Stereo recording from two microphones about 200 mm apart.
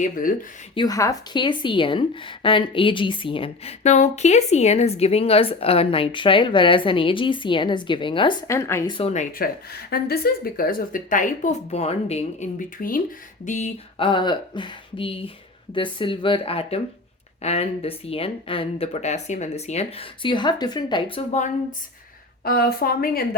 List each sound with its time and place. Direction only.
0.0 s speech: 45° left (ahead or behind)
0.7 s a woman's voice: 20° left (ahead or behind)
9.0 s speech: 30° left (ahead or behind)
9.4 s speech: 50° left (ahead or behind)
14.0 s a woman's voice: 25° left (ahead or behind)
21.3 s speech: 35° left (ahead or behind)
22.4 s speech: 50° left (ahead or behind)